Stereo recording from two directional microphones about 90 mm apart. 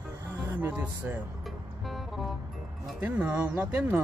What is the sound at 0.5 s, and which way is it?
Music, 20° right (ahead or behind).